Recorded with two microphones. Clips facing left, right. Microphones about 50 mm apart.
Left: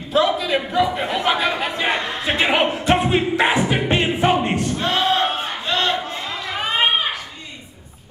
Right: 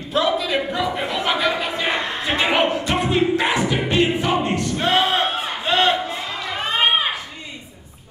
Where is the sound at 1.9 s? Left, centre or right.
Centre.